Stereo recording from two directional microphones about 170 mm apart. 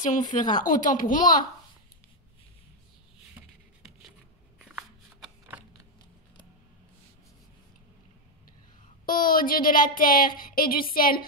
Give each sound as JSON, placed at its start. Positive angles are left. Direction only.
{"t": 0.3, "sound": "speech", "side_deg": 50}
{"t": 4.6, "sound": "a sound", "side_deg": -5}
{"t": 9.0, "sound": "speech", "side_deg": 55}